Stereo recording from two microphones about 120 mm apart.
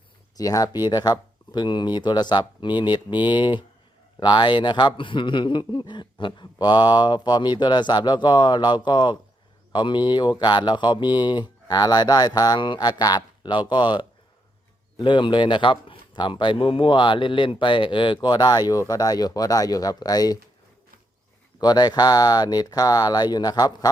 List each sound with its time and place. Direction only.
0.3 s speech: 30° left (ahead or behind)
21.6 s speech: 35° left (ahead or behind)